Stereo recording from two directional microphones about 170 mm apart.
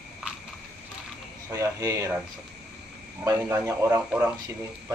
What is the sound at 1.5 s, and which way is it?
Speech, 20° right (ahead or behind).